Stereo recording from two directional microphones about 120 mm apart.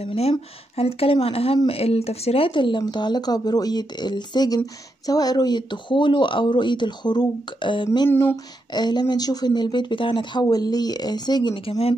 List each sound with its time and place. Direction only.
0.0 s speech: 60° left (ahead or behind); by 8.1 s 40° left (ahead or behind)
8.1 s speech: 15° left (ahead or behind)
8.7 s speech: 35° left (ahead or behind)